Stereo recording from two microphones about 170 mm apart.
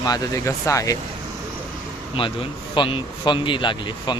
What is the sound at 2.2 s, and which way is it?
Speech, 30° left (ahead or behind).